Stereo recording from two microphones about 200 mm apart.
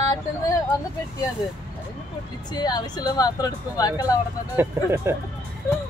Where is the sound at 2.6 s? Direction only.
20° left (ahead or behind).